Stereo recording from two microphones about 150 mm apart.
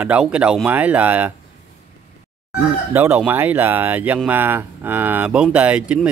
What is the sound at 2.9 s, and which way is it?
Speech, 15° right (ahead or behind).